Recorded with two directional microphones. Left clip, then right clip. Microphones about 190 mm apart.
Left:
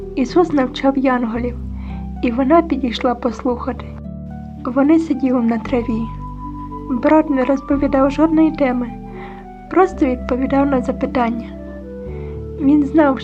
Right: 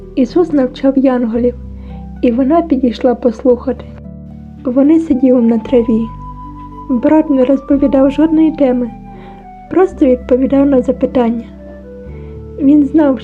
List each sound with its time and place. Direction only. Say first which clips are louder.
0.2 s a woman's voice: right 4 dB; 10° right (ahead or behind)
12.6 s a woman's voice: right 4 dB; 15° right (ahead or behind)